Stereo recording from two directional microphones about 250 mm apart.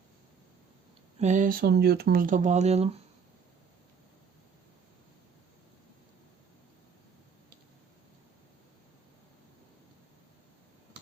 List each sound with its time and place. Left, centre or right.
1.2 s speech: right